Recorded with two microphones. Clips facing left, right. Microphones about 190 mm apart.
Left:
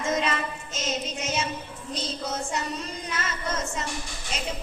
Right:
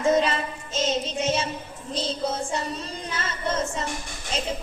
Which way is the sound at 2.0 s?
30° right (ahead or behind).